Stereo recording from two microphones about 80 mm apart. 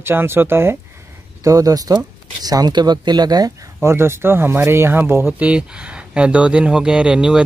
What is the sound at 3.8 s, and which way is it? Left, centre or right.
Speech, right.